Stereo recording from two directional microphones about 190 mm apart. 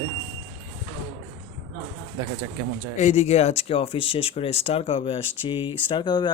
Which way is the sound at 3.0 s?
35° left (ahead or behind).